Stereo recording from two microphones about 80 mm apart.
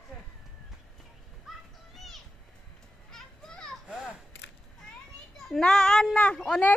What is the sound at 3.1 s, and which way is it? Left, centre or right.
Children playing, centre.